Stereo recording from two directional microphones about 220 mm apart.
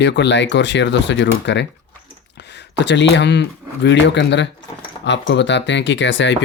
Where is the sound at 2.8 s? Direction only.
55° left (ahead or behind).